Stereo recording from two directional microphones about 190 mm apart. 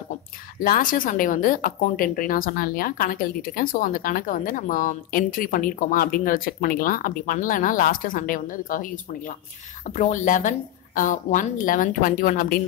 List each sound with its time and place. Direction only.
0.6 s speech: 45° left (ahead or behind)